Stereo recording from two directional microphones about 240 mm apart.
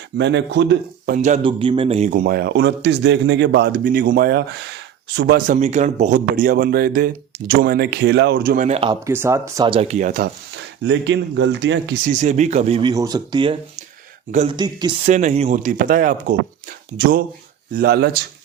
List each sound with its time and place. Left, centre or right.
0.2 s speech: right
1.1 s speech: right
5.5 s speech: right
9.0 s speech: centre; by 10.6 s right
10.8 s speech: right
12.1 s speech: right
12.9 s speech: centre
15.1 s speech: right
17.7 s speech: right